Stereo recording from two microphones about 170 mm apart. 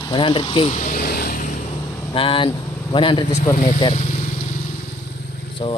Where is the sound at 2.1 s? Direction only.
30° left (ahead or behind).